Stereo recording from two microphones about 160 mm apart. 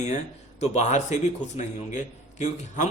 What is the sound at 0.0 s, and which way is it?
Speech, 45° left (ahead or behind).